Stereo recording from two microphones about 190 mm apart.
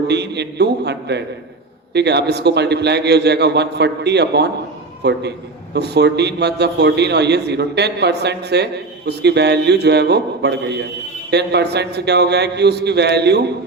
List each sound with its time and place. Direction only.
0.1 s a man's voice: 65° right (ahead or behind)